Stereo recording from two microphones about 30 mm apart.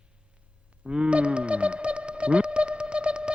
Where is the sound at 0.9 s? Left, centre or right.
Right.